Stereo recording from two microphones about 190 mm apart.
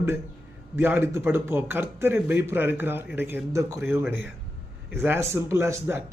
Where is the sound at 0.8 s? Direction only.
10° right (ahead or behind).